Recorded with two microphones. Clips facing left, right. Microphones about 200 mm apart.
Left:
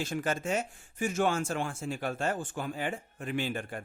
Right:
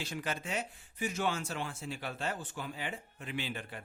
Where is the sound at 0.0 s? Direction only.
45° left (ahead or behind).